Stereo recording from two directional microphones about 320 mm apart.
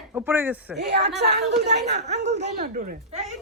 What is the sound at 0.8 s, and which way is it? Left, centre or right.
Speech, right.